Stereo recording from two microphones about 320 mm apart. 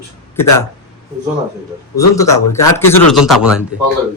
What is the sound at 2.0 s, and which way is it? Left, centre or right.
A man's voice, centre.